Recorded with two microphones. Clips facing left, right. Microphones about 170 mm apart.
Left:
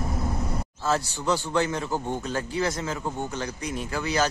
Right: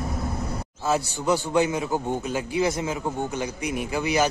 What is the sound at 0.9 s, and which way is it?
A man's voice, 10° right (ahead or behind).